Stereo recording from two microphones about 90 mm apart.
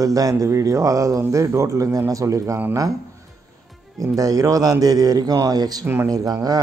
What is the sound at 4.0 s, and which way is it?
A man's voice, 40° right (ahead or behind).